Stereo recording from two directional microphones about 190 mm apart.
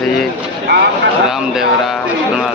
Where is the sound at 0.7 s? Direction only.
65° right (ahead or behind).